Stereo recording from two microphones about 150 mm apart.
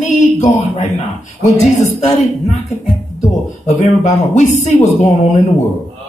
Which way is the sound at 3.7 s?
50° left (ahead or behind).